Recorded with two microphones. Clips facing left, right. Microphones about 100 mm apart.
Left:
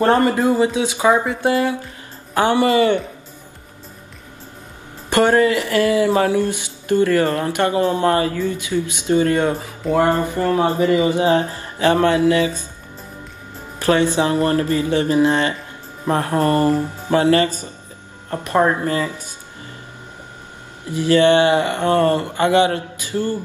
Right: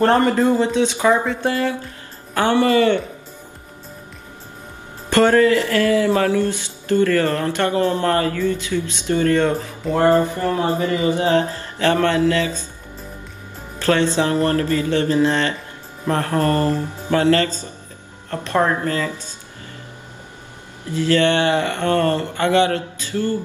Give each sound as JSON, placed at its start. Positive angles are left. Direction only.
{"t": 0.0, "sound": "speech", "side_deg": 10}
{"t": 5.1, "sound": "speech", "side_deg": 20}
{"t": 13.7, "sound": "speech", "side_deg": 15}
{"t": 20.9, "sound": "speech", "side_deg": 15}